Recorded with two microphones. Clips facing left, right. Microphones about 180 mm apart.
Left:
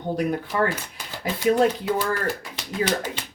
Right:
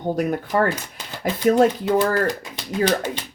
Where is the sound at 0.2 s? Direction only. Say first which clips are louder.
Right 2 dB; 45° right (ahead or behind).